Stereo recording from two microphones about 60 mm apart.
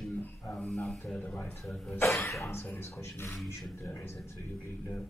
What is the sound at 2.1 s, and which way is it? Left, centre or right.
Speech, left.